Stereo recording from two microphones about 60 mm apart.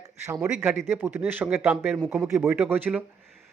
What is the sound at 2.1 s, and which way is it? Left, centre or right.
Speech, right.